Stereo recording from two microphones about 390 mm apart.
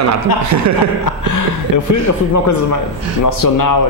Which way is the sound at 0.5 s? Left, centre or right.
Right.